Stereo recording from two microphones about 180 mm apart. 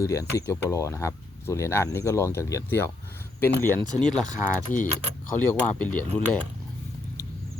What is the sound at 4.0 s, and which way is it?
Speech, 5° left (ahead or behind).